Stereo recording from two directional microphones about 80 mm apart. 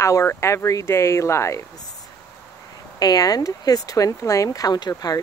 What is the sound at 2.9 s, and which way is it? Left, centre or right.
Speech, left.